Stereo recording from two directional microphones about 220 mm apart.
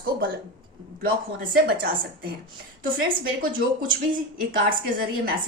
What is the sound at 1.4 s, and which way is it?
Speech, 45° right (ahead or behind).